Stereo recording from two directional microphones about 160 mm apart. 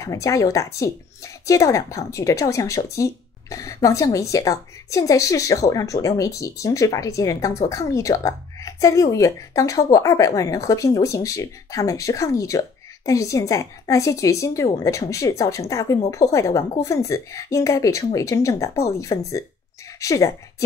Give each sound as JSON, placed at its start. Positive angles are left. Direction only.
{"t": 0.0, "sound": "a woman's voice", "side_deg": 20}